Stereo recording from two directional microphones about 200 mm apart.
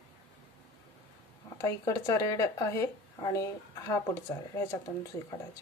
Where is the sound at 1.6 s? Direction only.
15° left (ahead or behind).